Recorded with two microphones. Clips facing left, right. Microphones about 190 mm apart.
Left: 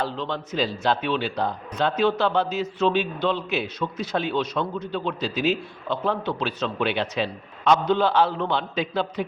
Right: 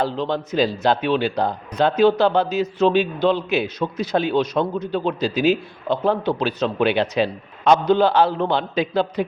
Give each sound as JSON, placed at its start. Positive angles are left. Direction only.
{"t": 0.0, "sound": "a man's voice", "side_deg": -40}